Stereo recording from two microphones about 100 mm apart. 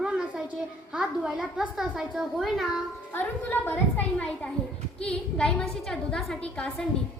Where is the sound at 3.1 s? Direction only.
20° left (ahead or behind).